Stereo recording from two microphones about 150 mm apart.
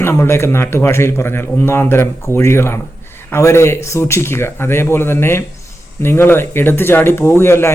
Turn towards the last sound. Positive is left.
turn(degrees=15)  # may be behind; listen again after turning